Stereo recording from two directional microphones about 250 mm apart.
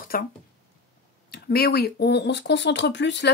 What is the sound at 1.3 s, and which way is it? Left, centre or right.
Speech, left.